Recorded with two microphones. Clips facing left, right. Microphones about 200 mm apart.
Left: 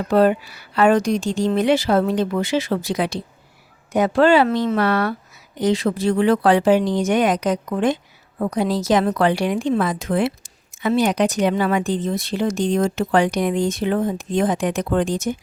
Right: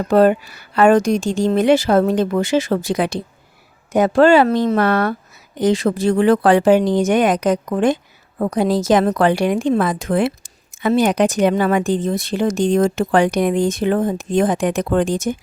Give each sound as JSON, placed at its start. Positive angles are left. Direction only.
{"t": 0.1, "sound": "a woman's voice", "side_deg": -50}